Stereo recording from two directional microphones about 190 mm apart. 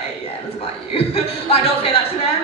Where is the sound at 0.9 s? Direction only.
30° left (ahead or behind).